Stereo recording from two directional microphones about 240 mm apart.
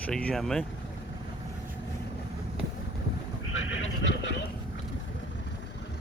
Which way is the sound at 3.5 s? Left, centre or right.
Left.